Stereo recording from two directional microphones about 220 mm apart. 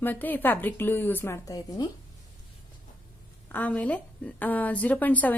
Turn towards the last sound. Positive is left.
turn(degrees=5)  # may be behind; listen again after turning